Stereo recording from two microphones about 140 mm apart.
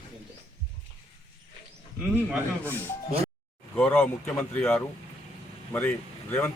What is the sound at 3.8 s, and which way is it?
Speech, 10° left (ahead or behind).